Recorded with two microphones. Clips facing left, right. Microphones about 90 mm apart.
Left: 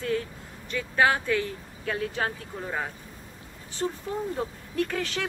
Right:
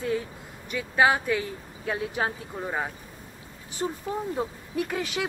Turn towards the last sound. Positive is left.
turn(degrees=-15)  # may be behind; listen again after turning